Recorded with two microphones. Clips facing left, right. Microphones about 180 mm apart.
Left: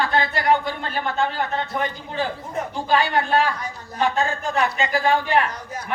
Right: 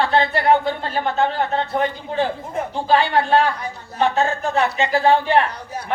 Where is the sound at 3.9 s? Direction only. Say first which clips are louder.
Right 3 dB; 30° right (ahead or behind).